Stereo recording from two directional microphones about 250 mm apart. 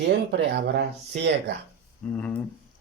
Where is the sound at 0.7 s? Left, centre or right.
Right.